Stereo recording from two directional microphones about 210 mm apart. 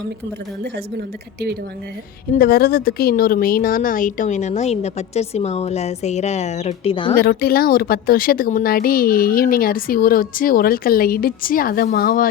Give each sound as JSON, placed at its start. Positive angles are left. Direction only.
{"t": 0.6, "sound": "a woman's voice", "side_deg": -50}
{"t": 2.3, "sound": "a woman's voice", "side_deg": 45}
{"t": 7.2, "sound": "speech", "side_deg": 45}